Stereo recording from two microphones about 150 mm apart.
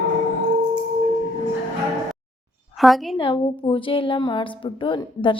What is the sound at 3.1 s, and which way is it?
A woman's voice, 35° left (ahead or behind).